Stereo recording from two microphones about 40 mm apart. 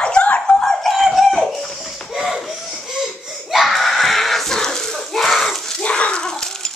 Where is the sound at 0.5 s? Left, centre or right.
Centre.